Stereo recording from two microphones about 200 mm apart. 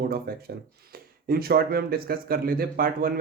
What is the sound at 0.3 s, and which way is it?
A man's voice, 50° right (ahead or behind).